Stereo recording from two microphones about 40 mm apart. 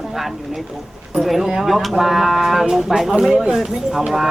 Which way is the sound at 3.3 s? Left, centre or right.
Right.